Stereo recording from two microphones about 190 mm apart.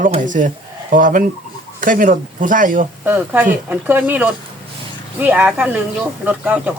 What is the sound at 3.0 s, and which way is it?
Speech, 10° right (ahead or behind).